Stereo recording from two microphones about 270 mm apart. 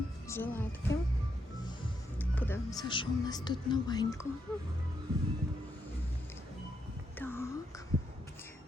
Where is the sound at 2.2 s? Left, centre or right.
Centre.